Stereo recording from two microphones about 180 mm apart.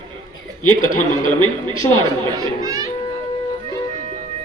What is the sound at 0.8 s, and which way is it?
Speech, 45° left (ahead or behind).